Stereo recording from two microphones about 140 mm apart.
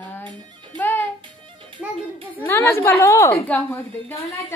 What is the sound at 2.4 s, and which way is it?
A woman's voice, 15° left (ahead or behind).